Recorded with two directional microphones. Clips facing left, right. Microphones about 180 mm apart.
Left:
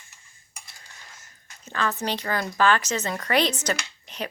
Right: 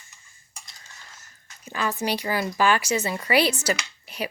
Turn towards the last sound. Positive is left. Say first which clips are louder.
# right 2 dB
turn(degrees=-10)  # may be behind; listen again after turning